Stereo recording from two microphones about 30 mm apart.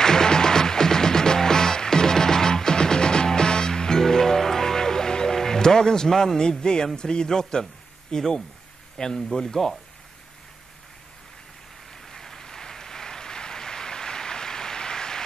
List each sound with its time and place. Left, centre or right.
0.0 s music: left
6.6 s speech: left
12.1 s applause: centre